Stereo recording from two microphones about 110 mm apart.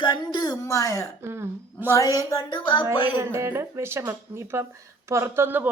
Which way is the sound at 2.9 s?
45° left (ahead or behind).